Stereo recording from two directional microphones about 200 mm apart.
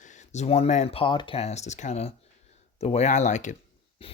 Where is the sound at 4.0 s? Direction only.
25° left (ahead or behind).